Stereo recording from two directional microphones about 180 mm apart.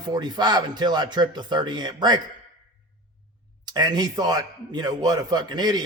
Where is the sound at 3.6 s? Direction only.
25° right (ahead or behind).